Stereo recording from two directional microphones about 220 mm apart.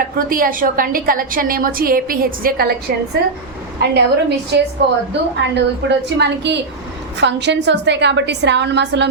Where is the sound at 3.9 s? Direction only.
50° right (ahead or behind).